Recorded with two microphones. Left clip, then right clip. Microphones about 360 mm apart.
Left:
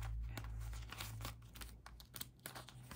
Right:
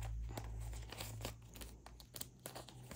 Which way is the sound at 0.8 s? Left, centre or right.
Centre.